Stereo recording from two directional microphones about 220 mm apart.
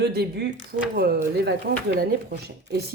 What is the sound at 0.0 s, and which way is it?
A woman's voice, 50° right (ahead or behind).